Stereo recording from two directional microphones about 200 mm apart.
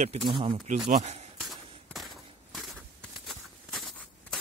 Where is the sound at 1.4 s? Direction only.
Centre (ahead or behind).